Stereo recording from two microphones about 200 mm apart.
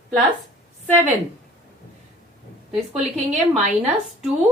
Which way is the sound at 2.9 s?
35° right (ahead or behind).